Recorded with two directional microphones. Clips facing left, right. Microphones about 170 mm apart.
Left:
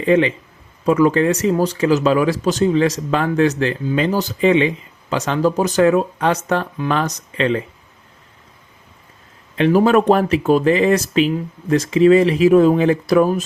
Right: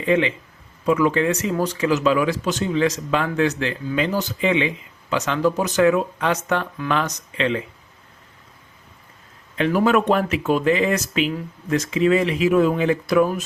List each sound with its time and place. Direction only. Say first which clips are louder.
0.0 s speech: left 4 dB; 40° left (ahead or behind)
9.6 s speech: left 5 dB; 30° left (ahead or behind)